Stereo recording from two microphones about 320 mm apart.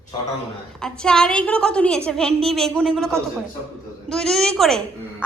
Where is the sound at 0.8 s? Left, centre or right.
Centre.